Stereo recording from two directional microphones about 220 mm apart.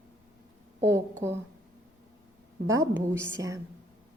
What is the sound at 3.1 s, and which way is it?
Speech, 10° right (ahead or behind).